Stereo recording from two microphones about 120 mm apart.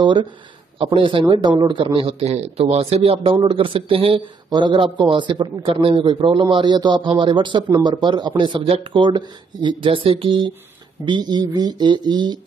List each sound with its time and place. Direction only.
0.0 s a man's voice: 40° right (ahead or behind)